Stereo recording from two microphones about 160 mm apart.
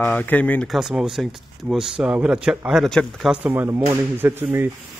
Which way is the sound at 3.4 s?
10° right (ahead or behind).